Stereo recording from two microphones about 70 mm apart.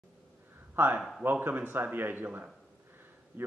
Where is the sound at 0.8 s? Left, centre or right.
Right.